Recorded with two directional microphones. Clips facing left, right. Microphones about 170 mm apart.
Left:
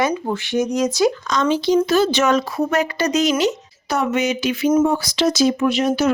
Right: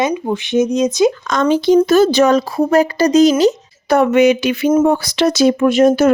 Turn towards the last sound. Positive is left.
turn(degrees=-50)  # may be behind; listen again after turning